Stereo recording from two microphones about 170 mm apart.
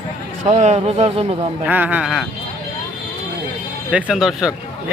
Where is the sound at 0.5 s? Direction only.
40° right (ahead or behind).